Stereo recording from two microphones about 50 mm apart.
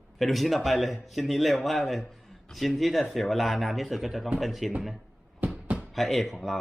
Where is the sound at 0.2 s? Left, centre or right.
Centre.